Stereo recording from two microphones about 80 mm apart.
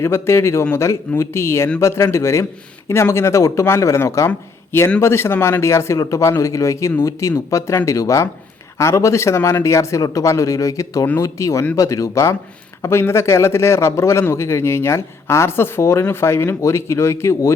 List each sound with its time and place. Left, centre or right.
0.0 s a man's voice: left